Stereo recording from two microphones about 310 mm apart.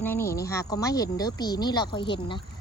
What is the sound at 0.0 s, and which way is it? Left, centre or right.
Speech, centre.